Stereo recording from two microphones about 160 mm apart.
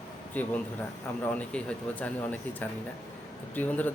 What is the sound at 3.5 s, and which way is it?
Speech, 10° left (ahead or behind).